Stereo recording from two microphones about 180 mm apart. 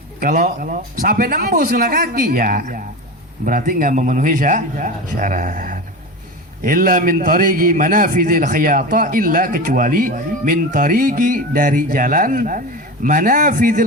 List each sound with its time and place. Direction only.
0.2 s a man's voice: 50° right (ahead or behind)